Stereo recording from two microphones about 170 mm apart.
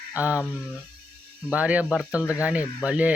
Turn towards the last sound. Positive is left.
turn(degrees=-10)  # may be behind; listen again after turning